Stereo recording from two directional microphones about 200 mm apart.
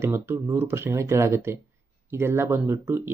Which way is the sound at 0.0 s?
10° right (ahead or behind).